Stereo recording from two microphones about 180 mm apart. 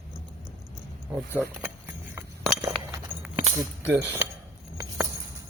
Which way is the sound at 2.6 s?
15° right (ahead or behind).